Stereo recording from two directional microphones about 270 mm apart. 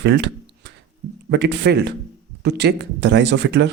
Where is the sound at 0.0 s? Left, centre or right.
Right.